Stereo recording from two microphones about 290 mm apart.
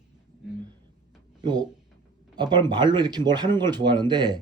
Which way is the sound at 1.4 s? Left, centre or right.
Centre.